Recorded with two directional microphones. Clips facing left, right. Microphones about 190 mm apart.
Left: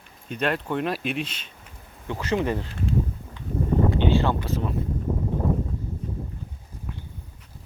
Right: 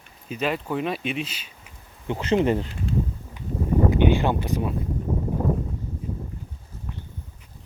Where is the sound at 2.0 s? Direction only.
20° right (ahead or behind).